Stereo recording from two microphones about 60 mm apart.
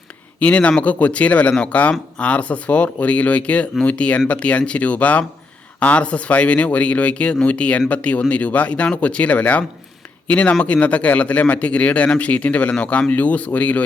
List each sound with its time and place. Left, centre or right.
0.3 s speech: left